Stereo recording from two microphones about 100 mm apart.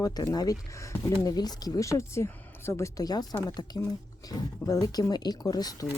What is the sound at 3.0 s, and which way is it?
Speech, 40° left (ahead or behind).